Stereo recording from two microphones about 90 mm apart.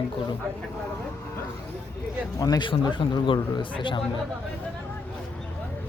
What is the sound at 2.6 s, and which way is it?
Speech, 65° left (ahead or behind).